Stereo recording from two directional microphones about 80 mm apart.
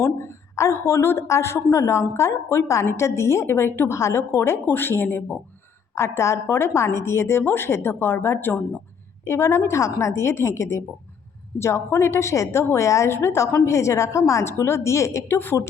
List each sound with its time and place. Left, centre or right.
0.0 s a woman's voice: left